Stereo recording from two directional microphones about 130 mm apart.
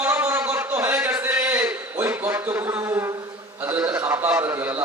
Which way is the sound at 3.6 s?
15° right (ahead or behind).